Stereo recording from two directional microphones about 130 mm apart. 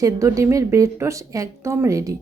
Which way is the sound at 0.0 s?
25° right (ahead or behind).